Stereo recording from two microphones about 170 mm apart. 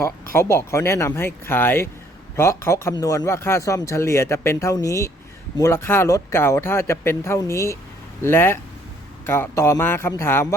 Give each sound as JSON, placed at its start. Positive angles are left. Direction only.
{"t": 0.3, "sound": "speech", "side_deg": 15}